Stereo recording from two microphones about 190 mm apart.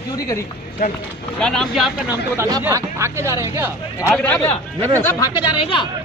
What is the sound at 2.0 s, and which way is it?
Speech, 10° right (ahead or behind).